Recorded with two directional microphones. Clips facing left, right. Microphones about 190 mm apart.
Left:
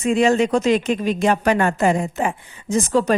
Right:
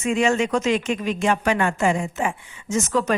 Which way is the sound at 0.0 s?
35° left (ahead or behind).